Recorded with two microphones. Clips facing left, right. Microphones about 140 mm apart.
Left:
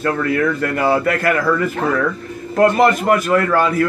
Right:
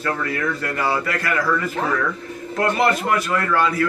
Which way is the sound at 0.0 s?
50° left (ahead or behind).